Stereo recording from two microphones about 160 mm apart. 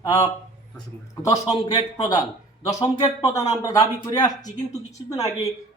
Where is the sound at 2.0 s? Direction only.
25° left (ahead or behind).